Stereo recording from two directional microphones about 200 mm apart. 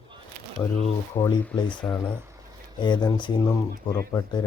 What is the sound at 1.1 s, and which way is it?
Speech, 15° left (ahead or behind).